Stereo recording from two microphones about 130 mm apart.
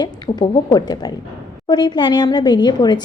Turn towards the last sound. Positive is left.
turn(degrees=35)  # may be behind; listen again after turning